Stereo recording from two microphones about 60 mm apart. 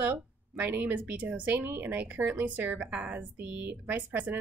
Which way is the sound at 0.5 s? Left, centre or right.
Right.